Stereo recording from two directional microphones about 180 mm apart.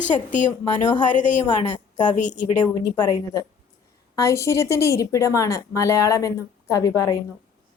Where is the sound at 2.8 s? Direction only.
20° left (ahead or behind).